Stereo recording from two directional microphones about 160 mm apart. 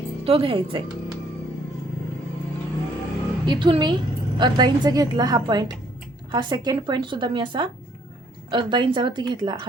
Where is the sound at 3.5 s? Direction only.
30° right (ahead or behind).